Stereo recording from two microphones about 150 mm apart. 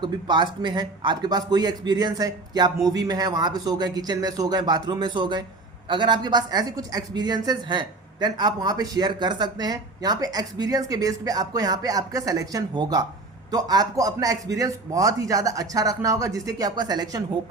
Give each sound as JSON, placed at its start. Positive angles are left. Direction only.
{"t": 0.0, "sound": "speech", "side_deg": -30}